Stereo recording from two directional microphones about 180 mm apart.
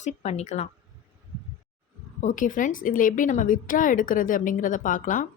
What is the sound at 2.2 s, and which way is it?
A woman's voice, 45° left (ahead or behind).